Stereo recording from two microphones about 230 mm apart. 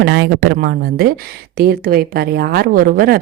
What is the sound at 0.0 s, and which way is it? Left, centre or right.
A woman's voice, right.